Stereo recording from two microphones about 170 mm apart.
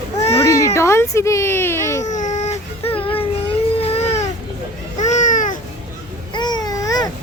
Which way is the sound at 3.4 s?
35° left (ahead or behind).